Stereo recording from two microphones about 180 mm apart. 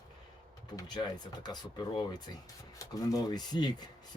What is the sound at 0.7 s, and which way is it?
Speech, 25° left (ahead or behind).